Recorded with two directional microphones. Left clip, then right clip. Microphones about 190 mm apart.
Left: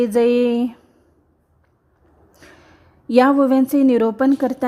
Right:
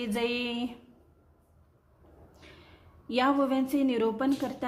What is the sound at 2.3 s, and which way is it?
A woman's voice, 50° left (ahead or behind).